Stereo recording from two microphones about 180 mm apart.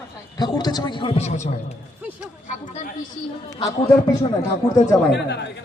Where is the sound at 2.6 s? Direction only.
40° left (ahead or behind).